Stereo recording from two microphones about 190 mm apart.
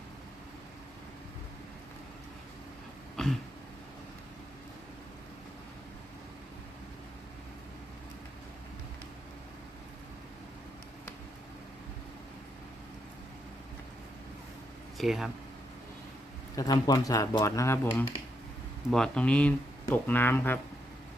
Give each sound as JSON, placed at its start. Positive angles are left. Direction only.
{"t": 3.2, "sound": "a sound", "side_deg": 5}
{"t": 14.9, "sound": "speech", "side_deg": 0}
{"t": 16.6, "sound": "speech", "side_deg": 20}